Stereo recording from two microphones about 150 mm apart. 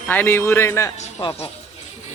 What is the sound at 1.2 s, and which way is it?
Speech, 35° left (ahead or behind).